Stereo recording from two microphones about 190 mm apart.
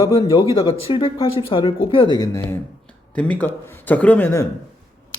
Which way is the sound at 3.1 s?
5° left (ahead or behind).